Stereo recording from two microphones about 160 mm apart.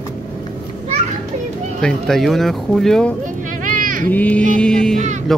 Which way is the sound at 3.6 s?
55° right (ahead or behind).